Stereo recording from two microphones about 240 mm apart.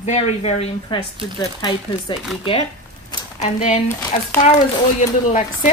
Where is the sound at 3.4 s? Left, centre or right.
Left.